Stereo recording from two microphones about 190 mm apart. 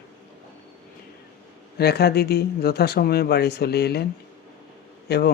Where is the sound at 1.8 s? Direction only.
55° left (ahead or behind).